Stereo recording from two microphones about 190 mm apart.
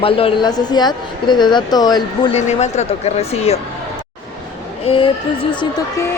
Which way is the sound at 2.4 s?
35° left (ahead or behind).